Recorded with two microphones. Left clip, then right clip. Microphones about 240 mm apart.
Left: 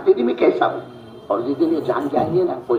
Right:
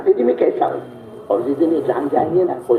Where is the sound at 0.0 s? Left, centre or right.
Left.